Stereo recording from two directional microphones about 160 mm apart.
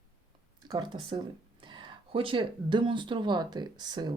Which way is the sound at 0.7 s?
25° right (ahead or behind).